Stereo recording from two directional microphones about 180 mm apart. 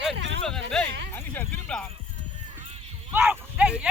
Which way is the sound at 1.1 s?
10° left (ahead or behind).